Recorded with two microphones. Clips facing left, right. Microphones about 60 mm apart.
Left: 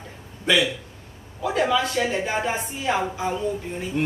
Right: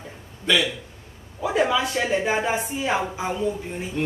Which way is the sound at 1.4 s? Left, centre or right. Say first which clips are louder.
Even; centre.